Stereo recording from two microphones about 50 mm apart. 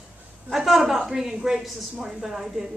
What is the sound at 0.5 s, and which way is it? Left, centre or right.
A woman's voice, centre.